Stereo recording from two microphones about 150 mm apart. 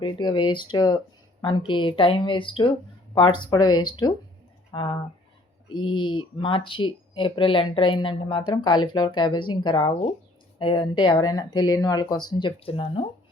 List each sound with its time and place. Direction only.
0.0 s speech: 30° left (ahead or behind)